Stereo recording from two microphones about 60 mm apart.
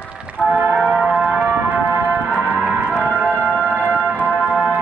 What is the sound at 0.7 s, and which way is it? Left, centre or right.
Music, centre.